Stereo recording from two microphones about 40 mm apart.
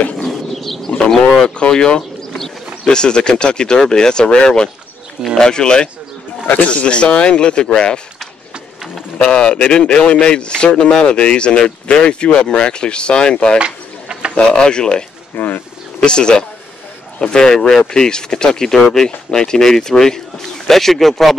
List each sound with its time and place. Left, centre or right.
0.2 s mechanisms: centre
1.2 s speech: centre
9.3 s speech: left
13.6 s a sound: right
14.3 s speech: centre
15.3 s pigeon: left
16.0 s speech: left; by 21.4 s centre